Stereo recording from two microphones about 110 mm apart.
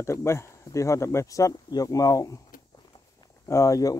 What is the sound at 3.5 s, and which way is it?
Speech, 30° left (ahead or behind).